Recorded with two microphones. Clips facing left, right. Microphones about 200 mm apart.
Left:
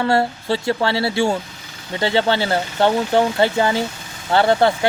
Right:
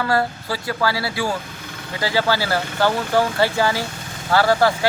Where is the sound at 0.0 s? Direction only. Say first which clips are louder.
Left 3 dB; 25° left (ahead or behind).